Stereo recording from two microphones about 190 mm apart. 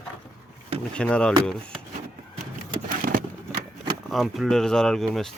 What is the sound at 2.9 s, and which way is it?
Vehicle, 50° right (ahead or behind).